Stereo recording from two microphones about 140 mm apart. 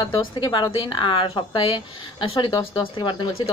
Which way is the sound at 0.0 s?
35° left (ahead or behind).